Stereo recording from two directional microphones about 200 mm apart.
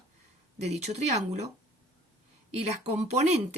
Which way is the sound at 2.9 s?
35° right (ahead or behind).